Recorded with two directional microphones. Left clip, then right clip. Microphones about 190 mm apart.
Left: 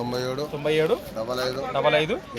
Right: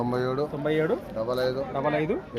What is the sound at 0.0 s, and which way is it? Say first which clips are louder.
A man's voice: right 1 dB; 40° right (ahead or behind).